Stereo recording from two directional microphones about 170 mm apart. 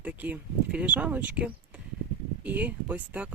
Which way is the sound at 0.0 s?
10° right (ahead or behind).